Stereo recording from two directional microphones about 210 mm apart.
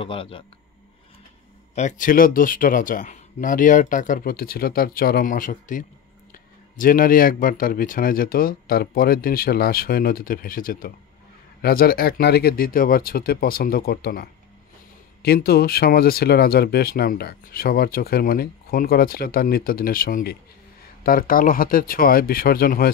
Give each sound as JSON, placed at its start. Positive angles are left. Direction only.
{"t": 0.0, "sound": "speech", "side_deg": 25}
{"t": 1.8, "sound": "speech", "side_deg": 35}